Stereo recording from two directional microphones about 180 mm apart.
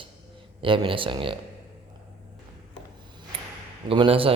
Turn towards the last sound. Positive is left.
turn(degrees=-30)  # may be behind; listen again after turning